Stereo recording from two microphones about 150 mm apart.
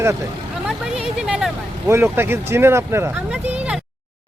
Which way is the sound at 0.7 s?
5° right (ahead or behind).